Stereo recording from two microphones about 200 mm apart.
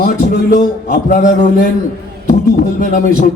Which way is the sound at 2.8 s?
40° left (ahead or behind).